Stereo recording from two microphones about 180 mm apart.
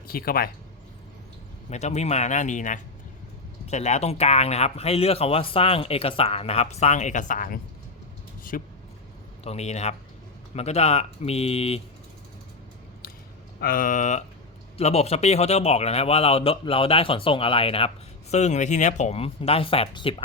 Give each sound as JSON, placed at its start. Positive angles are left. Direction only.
{"t": 0.1, "sound": "speech", "side_deg": 55}
{"t": 1.7, "sound": "a man's voice", "side_deg": 40}
{"t": 9.4, "sound": "a man's voice", "side_deg": 35}
{"t": 13.6, "sound": "a man's voice", "side_deg": 55}